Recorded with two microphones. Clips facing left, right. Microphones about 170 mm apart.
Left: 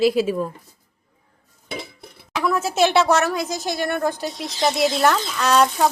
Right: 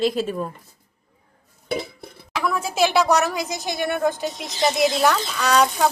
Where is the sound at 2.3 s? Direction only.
Centre (ahead or behind).